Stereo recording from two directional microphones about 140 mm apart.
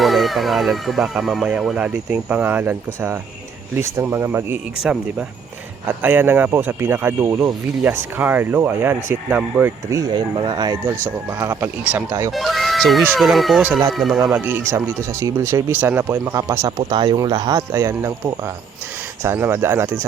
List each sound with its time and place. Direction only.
0.0 s speech: centre (ahead or behind); by 4.6 s 15° right (ahead or behind)
6.0 s speech: 15° right (ahead or behind)
9.9 s speech: 30° right (ahead or behind)
11.3 s speech: 10° right (ahead or behind)
14.3 s speech: 15° right (ahead or behind)
19.2 s speech: 15° right (ahead or behind)